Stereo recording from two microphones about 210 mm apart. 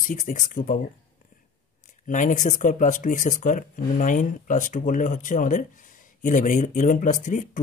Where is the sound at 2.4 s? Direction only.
35° left (ahead or behind).